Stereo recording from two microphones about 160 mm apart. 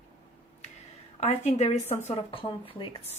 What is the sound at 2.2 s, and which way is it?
Speech, 30° left (ahead or behind).